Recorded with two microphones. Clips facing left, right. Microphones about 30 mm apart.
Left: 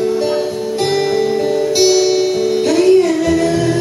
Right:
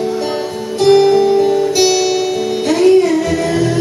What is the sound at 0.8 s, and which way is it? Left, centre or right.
Music, right.